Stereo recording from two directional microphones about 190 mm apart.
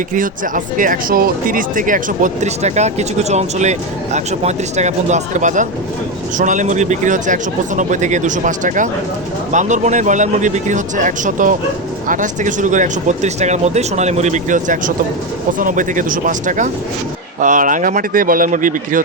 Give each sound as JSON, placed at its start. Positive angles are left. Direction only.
{"t": 0.1, "sound": "speech", "side_deg": -45}